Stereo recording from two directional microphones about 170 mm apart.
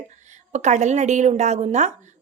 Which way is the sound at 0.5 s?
45° right (ahead or behind).